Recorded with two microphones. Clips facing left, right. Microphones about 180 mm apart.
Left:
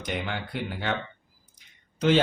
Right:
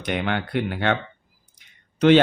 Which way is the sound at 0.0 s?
70° right (ahead or behind).